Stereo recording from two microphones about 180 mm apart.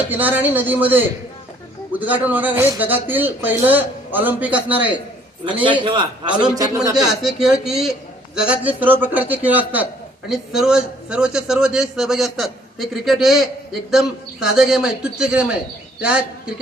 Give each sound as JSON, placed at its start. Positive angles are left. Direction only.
{"t": 0.1, "sound": "speech", "side_deg": -10}
{"t": 5.8, "sound": "a man's voice", "side_deg": -25}
{"t": 6.9, "sound": "a man's voice", "side_deg": 0}